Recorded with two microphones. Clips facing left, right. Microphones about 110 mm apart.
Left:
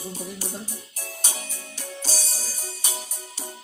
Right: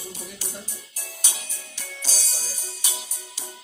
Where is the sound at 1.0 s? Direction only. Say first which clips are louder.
Left 3 dB; 40° left (ahead or behind).